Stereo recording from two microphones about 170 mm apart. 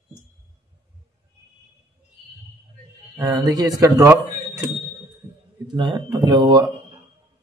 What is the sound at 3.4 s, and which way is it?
Speech, 20° right (ahead or behind).